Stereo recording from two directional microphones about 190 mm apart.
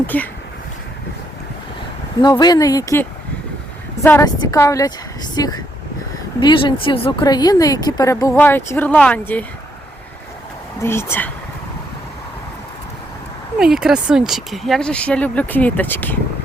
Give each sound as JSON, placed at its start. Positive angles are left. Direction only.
{"t": 0.1, "sound": "speech", "side_deg": 10}
{"t": 2.2, "sound": "speech", "side_deg": 20}
{"t": 10.8, "sound": "speech", "side_deg": 10}
{"t": 13.6, "sound": "speech", "side_deg": -5}